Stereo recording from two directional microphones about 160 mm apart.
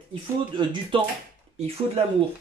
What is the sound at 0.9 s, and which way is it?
Speech, 35° right (ahead or behind).